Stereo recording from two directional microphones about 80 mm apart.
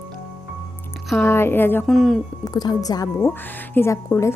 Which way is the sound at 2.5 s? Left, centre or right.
Left.